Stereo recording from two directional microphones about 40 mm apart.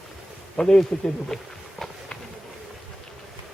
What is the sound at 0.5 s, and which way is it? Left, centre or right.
Speech, centre.